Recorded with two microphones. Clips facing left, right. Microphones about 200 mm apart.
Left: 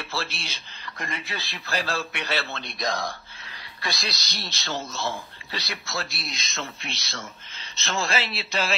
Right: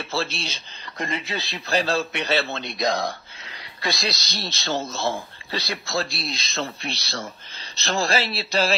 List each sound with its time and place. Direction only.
0.0 s a man's voice: 25° right (ahead or behind)